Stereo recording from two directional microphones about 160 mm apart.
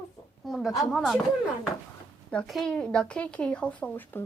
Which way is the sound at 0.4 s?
Centre (ahead or behind).